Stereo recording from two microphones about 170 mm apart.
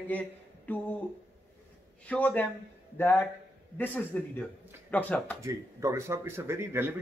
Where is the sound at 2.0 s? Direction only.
10° left (ahead or behind).